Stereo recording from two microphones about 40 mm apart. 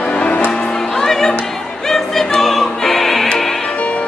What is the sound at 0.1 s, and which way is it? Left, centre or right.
Music, left.